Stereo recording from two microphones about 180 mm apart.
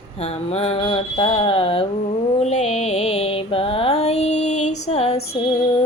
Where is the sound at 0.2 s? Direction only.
35° left (ahead or behind).